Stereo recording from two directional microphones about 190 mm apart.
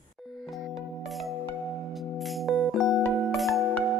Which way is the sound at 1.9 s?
Centre (ahead or behind).